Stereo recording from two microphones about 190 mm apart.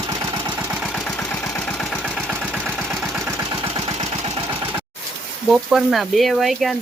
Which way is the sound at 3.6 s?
30° right (ahead or behind).